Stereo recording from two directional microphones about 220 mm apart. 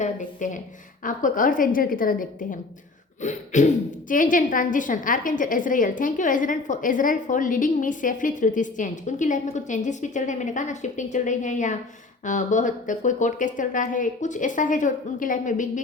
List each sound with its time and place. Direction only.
0.0 s a woman's voice: 35° left (ahead or behind)